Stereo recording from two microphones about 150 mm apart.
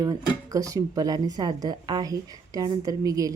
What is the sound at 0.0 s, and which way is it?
Speech, 20° right (ahead or behind).